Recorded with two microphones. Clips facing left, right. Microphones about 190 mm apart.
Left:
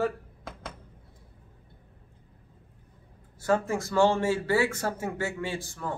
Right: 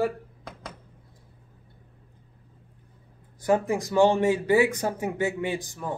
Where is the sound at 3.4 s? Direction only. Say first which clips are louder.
Right 3 dB; 15° right (ahead or behind).